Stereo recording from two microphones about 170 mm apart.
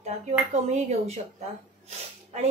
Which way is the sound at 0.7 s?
40° right (ahead or behind).